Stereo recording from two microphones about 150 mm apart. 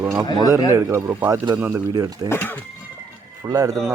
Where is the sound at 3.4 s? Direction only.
25° right (ahead or behind).